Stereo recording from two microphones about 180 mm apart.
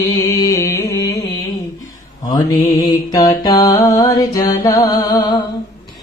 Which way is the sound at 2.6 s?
20° left (ahead or behind).